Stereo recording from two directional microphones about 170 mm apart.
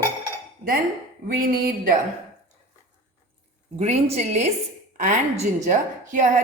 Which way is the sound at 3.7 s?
40° right (ahead or behind).